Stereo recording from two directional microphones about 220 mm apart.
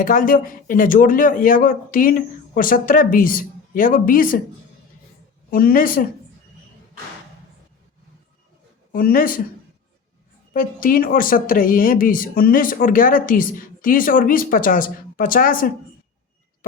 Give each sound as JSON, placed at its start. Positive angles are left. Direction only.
{"t": 0.0, "sound": "a woman's voice", "side_deg": 40}
{"t": 5.5, "sound": "a woman's voice", "side_deg": 40}
{"t": 8.9, "sound": "a woman's voice", "side_deg": 40}
{"t": 10.5, "sound": "a woman's voice", "side_deg": 40}